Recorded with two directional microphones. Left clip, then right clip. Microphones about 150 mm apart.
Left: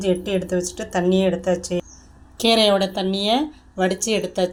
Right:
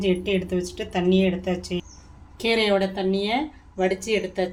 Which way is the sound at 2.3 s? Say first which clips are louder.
Left 5 dB; 50° left (ahead or behind).